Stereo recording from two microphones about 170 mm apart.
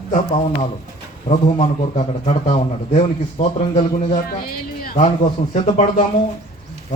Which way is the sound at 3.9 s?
60° left (ahead or behind).